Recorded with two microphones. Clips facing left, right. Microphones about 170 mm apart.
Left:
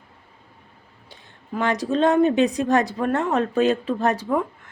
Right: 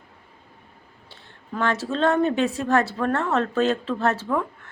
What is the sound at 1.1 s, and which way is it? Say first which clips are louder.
A woman's voice: left 3 dB; 15° left (ahead or behind).